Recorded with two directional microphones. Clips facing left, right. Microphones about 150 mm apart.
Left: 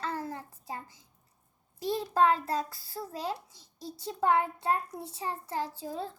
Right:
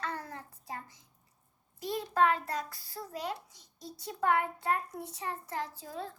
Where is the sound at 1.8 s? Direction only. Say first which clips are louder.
Left 2 dB; 30° left (ahead or behind).